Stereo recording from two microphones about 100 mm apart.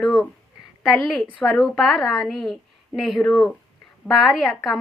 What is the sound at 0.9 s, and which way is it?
A woman's voice, centre (ahead or behind).